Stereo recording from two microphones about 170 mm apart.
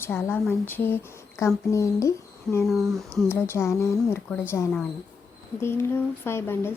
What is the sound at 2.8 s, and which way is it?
Speech, 15° right (ahead or behind).